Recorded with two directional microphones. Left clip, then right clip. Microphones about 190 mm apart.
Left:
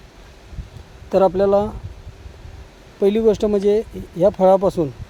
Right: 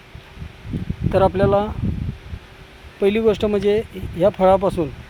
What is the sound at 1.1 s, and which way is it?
Speech, 20° left (ahead or behind).